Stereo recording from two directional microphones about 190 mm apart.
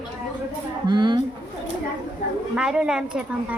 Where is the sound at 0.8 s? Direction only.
25° right (ahead or behind).